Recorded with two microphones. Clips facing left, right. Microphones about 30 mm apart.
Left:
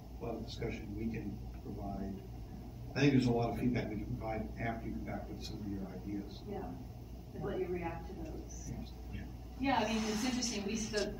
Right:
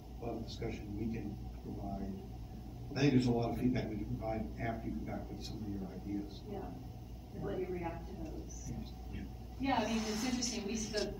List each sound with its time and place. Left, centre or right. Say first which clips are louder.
0.2 s a sound: even; centre
0.6 s a man's voice: even; centre
5.3 s a man's voice: even; centre